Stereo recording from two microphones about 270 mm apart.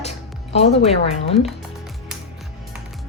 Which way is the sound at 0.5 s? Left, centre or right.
Left.